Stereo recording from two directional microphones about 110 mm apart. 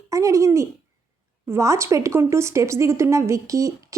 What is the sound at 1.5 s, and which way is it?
A woman's voice, 25° right (ahead or behind).